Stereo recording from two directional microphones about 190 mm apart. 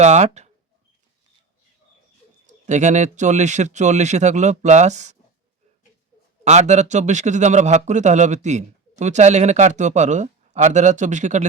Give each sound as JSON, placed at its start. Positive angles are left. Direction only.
{"t": 0.0, "sound": "speech", "side_deg": -35}
{"t": 2.5, "sound": "a man's voice", "side_deg": -40}
{"t": 6.4, "sound": "a man's voice", "side_deg": -35}